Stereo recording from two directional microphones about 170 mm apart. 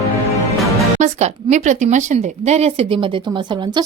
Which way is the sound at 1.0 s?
45° right (ahead or behind).